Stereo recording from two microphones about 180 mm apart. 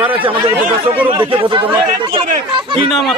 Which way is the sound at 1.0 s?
30° right (ahead or behind).